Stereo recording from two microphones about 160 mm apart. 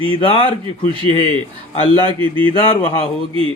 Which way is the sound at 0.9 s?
30° right (ahead or behind).